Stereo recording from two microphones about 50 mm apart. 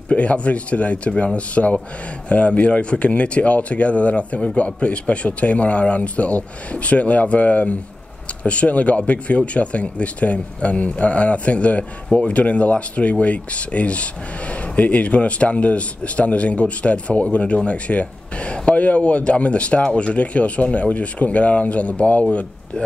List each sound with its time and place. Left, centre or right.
0.1 s speech: left